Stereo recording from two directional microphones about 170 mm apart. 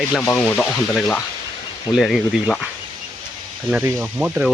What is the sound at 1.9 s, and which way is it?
Speech, centre (ahead or behind).